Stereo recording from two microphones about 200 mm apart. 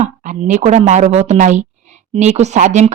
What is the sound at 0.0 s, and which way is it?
A woman's voice, 35° right (ahead or behind).